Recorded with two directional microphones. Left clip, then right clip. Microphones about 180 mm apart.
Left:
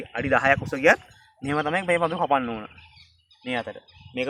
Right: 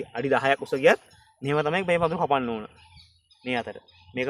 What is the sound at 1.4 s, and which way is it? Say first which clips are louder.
Speech: even; 65° right (ahead or behind).